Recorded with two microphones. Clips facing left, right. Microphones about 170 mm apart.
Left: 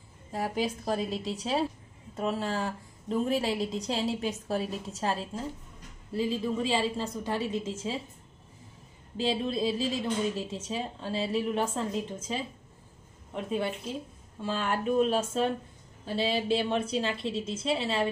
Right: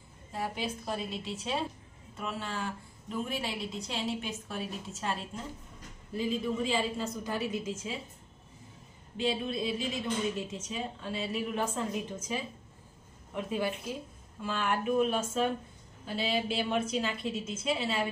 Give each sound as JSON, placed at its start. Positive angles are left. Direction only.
{"t": 0.3, "sound": "a woman's voice", "side_deg": 40}
{"t": 9.1, "sound": "a woman's voice", "side_deg": 30}